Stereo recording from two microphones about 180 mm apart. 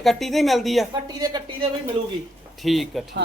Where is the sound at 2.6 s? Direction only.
Centre (ahead or behind).